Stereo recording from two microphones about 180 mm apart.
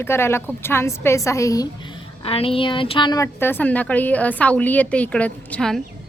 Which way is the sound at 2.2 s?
30° left (ahead or behind).